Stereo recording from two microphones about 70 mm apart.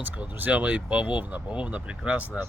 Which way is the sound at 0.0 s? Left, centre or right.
Right.